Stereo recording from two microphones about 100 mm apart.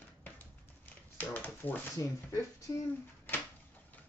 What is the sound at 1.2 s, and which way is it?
Speech, 15° left (ahead or behind).